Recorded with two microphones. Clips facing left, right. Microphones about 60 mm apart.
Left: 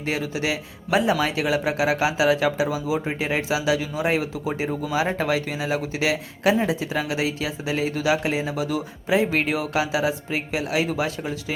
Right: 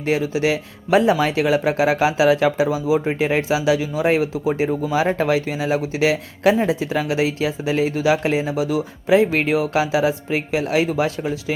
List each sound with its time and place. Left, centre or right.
0.0 s speech: right